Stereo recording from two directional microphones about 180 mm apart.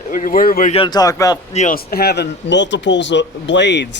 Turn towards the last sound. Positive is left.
turn(degrees=75)  # may be behind; listen again after turning